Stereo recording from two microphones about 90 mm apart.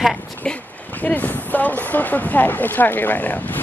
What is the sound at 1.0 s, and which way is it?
Speech, 20° left (ahead or behind).